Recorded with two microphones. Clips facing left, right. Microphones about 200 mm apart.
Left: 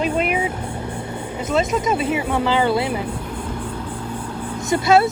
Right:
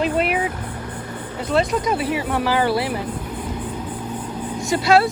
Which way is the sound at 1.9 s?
25° left (ahead or behind).